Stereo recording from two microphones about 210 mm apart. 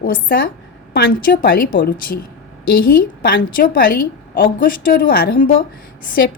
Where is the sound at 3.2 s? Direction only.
45° left (ahead or behind).